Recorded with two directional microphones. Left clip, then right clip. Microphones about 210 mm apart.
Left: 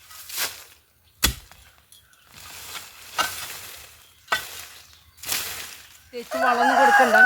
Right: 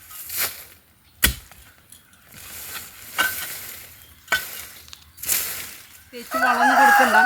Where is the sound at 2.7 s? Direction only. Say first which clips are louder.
Right 1 dB; 10° left (ahead or behind).